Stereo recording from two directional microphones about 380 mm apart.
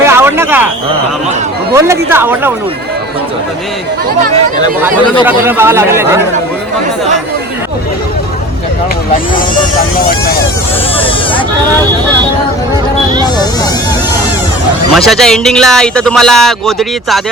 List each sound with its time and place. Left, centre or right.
0.0 s a sound: centre
1.7 s speech: centre
5.2 s speech: centre
10.9 s speech: centre
14.9 s speech: centre